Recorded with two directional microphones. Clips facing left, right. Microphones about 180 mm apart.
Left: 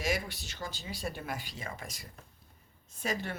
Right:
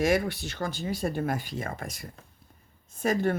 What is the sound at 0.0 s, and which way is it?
Speech, 55° right (ahead or behind).